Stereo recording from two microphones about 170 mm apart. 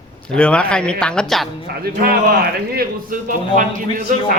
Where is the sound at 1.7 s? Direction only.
65° right (ahead or behind).